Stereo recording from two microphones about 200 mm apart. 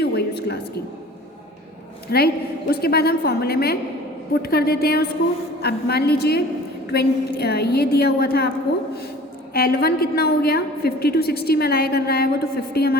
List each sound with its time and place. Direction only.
0.0 s a sound: 55° left (ahead or behind)
2.0 s a woman's voice: 50° left (ahead or behind)
9.5 s a woman's voice: 50° left (ahead or behind)